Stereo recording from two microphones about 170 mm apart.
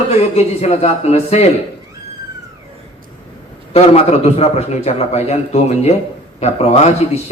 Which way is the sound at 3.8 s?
40° left (ahead or behind).